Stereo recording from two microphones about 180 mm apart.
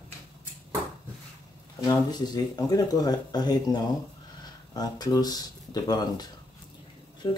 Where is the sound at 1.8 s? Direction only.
20° left (ahead or behind).